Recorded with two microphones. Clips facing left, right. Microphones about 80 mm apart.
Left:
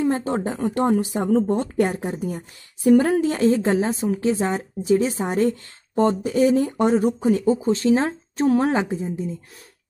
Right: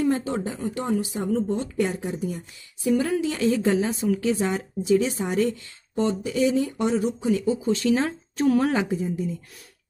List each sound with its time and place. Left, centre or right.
0.4 s speech: left